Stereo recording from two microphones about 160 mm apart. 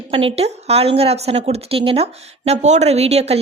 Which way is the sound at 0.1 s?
35° right (ahead or behind).